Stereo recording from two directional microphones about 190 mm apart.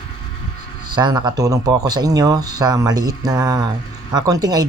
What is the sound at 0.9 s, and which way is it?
Speech, 25° right (ahead or behind).